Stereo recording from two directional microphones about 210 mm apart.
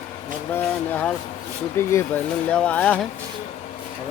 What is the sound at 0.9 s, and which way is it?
Speech, 5° left (ahead or behind).